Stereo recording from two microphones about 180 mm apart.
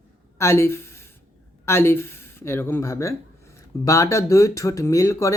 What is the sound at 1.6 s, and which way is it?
Speech, 15° left (ahead or behind).